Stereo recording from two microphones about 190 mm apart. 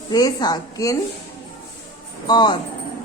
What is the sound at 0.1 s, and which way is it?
Speech, 20° left (ahead or behind).